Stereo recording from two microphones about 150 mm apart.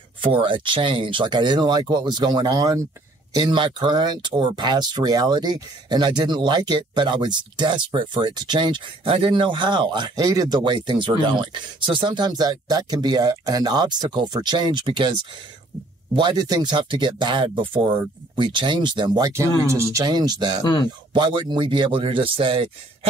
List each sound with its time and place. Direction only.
0.2 s speech: 35° right (ahead or behind)
16.2 s speech: 30° right (ahead or behind)
20.6 s speech: 30° left (ahead or behind)
21.1 s speech: 30° right (ahead or behind)